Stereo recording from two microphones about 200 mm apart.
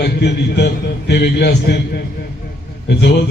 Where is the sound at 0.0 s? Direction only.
55° left (ahead or behind).